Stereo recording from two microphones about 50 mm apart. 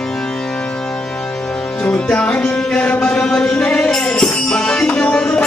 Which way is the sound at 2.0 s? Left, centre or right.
Left.